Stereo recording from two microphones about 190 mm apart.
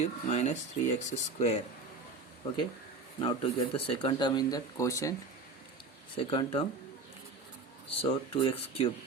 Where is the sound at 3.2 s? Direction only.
30° left (ahead or behind).